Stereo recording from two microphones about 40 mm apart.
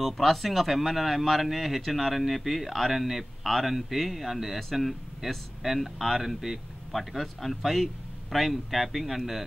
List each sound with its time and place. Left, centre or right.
0.0 s speech: centre